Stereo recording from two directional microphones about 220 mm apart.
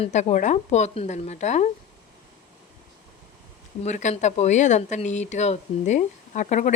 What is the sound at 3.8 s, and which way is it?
Speech, 30° left (ahead or behind).